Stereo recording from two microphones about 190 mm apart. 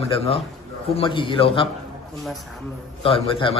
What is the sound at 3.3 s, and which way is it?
Speech, 25° left (ahead or behind).